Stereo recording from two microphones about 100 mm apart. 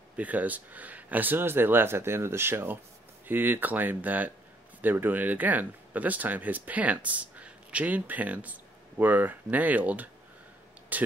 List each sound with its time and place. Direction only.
0.2 s speech: 15° right (ahead or behind)